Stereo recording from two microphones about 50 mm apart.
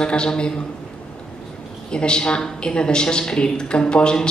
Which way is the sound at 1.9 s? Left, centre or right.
Centre.